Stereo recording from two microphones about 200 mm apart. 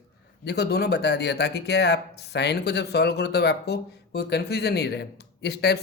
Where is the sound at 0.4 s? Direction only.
55° left (ahead or behind).